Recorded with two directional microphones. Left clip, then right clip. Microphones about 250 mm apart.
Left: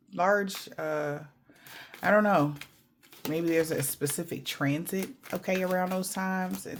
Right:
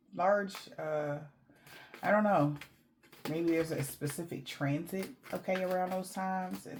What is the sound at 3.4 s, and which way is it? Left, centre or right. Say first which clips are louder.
Speech: left 5 dB; left.